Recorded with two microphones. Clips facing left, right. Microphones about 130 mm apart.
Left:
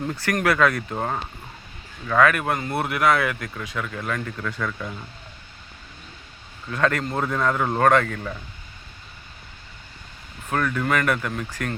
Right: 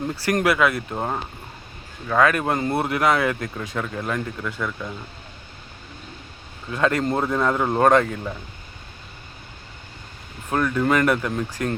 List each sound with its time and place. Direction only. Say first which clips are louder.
0.3 s speech: right 2 dB; 20° right (ahead or behind)
0.5 s speech: even; 10° right (ahead or behind)
2.0 s speech: even; 25° right (ahead or behind)
4.6 s speech: right 1 dB; 5° right (ahead or behind)
6.7 s speech: right 2 dB; 20° right (ahead or behind)
10.5 s speech: right 3 dB; 15° right (ahead or behind)
11.3 s speech: right 4 dB; 30° right (ahead or behind)